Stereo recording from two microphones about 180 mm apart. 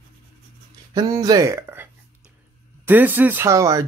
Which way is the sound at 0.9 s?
20° right (ahead or behind).